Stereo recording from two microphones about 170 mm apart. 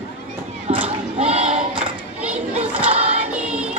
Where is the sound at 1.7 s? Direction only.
5° right (ahead or behind).